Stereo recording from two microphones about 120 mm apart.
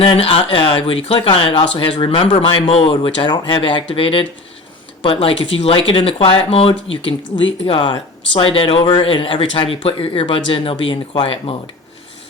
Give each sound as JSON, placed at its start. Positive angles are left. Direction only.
{"t": 0.0, "sound": "speech", "side_deg": 50}